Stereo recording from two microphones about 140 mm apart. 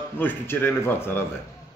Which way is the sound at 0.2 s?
15° left (ahead or behind).